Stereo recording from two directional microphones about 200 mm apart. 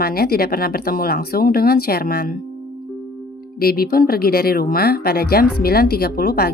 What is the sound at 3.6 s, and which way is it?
Speech, 50° left (ahead or behind).